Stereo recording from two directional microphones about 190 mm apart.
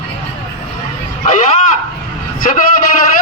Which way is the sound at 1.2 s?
40° left (ahead or behind).